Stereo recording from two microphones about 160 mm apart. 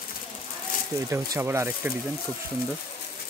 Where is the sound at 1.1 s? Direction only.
15° right (ahead or behind).